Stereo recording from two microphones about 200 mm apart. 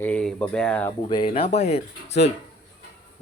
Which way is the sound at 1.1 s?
25° left (ahead or behind).